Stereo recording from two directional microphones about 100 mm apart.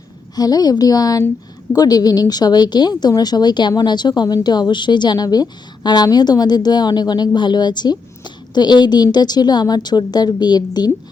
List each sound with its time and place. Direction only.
0.3 s a woman's voice: 40° left (ahead or behind)